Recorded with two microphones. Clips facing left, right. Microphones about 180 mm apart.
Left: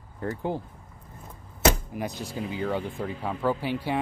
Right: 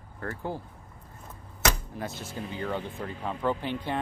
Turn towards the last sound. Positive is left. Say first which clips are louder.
# left 3 dB
turn(degrees=10)  # may be behind; listen again after turning